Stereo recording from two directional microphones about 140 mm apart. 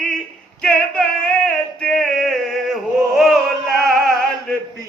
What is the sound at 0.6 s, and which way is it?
Female singing, 5° left (ahead or behind).